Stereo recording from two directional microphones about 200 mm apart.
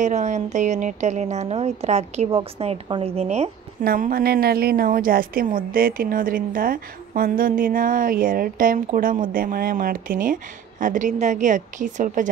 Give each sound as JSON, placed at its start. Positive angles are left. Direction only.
{"t": 0.0, "sound": "a woman's voice", "side_deg": -35}
{"t": 3.8, "sound": "a woman's voice", "side_deg": -45}